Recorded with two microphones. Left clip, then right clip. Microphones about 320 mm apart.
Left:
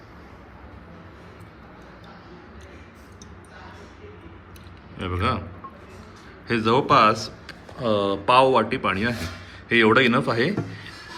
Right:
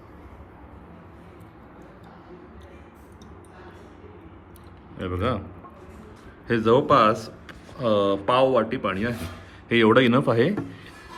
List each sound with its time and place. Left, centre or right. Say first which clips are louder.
4.9 s speech: left 2 dB; centre
6.5 s speech: even; centre